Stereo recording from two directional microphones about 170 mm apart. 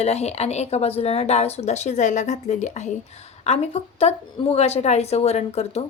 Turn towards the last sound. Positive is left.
turn(degrees=40)  # may be behind; listen again after turning